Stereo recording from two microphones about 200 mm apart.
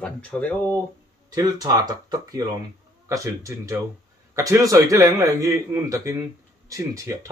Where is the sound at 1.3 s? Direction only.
20° right (ahead or behind).